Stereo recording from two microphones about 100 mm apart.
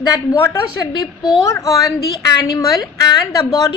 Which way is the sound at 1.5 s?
30° left (ahead or behind).